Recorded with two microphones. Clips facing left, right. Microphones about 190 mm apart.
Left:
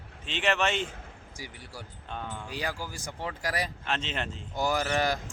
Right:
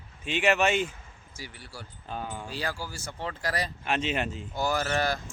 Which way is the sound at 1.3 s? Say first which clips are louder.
Even; 15° left (ahead or behind).